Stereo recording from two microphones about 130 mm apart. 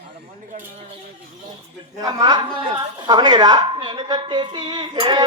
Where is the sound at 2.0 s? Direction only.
35° right (ahead or behind).